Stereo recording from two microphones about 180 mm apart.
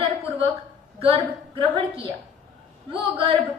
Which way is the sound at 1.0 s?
30° right (ahead or behind).